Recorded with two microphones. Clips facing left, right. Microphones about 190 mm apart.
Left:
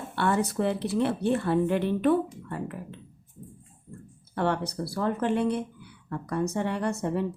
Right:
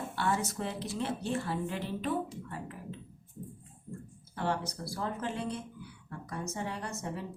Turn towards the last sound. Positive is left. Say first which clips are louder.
# left 10 dB
turn(degrees=65)  # may be behind; listen again after turning